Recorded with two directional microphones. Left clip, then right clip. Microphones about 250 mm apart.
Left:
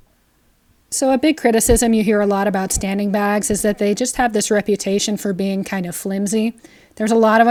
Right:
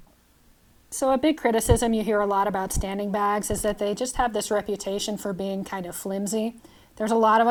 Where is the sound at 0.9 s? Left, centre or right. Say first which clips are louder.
Left 6 dB; left.